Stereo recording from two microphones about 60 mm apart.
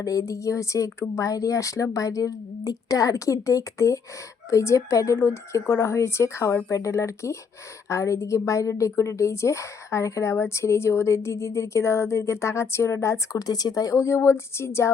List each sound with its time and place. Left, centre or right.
0.0 s speech: left
13.3 s speech: left